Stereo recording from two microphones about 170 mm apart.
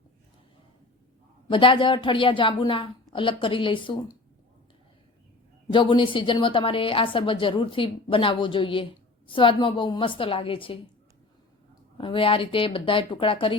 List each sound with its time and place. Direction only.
1.5 s a woman's voice: 30° left (ahead or behind)
5.7 s a woman's voice: 30° left (ahead or behind)